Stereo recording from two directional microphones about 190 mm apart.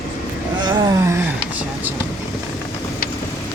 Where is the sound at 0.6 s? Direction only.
15° right (ahead or behind).